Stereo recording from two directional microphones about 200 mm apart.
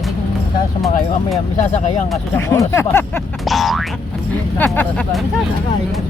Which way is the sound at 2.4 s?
15° left (ahead or behind).